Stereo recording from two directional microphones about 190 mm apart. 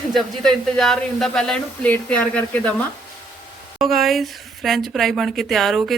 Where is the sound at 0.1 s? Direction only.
Centre (ahead or behind).